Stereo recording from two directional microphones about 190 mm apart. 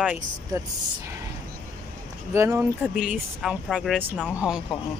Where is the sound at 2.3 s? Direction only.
15° right (ahead or behind).